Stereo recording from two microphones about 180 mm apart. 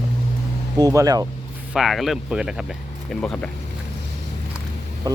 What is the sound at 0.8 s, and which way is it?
Speech, 20° right (ahead or behind).